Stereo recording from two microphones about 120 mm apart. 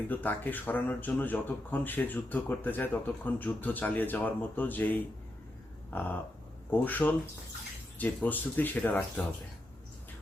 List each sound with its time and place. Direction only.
0.1 s speech: 15° left (ahead or behind)